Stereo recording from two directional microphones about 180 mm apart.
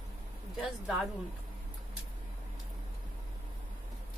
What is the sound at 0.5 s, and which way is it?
Speech, centre (ahead or behind).